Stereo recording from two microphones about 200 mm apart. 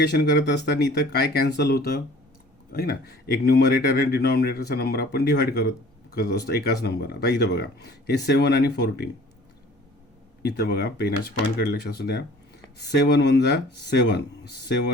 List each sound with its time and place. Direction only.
0.0 s speech: 60° left (ahead or behind)
10.4 s speech: 55° left (ahead or behind)